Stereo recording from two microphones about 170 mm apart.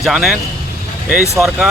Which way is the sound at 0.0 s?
Centre (ahead or behind).